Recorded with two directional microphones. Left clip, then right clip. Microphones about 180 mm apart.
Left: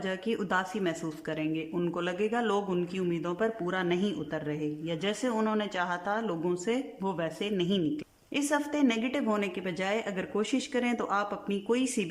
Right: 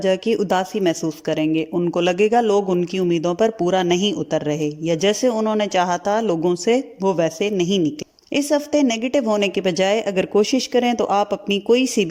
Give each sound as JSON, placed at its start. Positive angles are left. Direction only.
{"t": 0.0, "sound": "a woman's voice", "side_deg": -30}